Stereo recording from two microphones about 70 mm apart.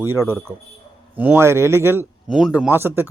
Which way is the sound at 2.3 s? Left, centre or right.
Centre.